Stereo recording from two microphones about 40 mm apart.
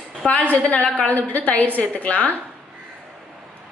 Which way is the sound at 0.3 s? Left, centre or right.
Left.